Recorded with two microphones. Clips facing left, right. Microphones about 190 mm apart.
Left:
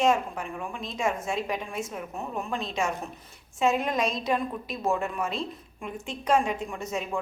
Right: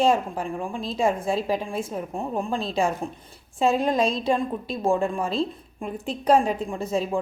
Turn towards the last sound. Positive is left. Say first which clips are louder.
# right 6 dB
turn(degrees=-30)  # may be behind; listen again after turning